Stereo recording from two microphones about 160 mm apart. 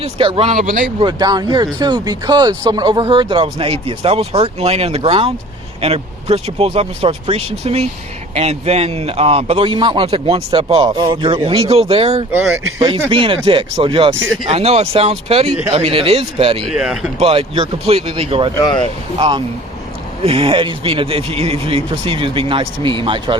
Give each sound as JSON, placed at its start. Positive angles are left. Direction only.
{"t": 0.0, "sound": "speech", "side_deg": -35}
{"t": 16.6, "sound": "speech", "side_deg": -5}
{"t": 17.2, "sound": "speech", "side_deg": -35}
{"t": 18.5, "sound": "speech", "side_deg": 25}
{"t": 20.2, "sound": "speech", "side_deg": -35}